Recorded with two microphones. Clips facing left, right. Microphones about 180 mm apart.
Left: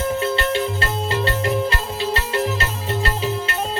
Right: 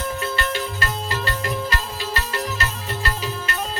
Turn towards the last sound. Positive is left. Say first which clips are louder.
# left 5 dB
turn(degrees=25)  # may be behind; listen again after turning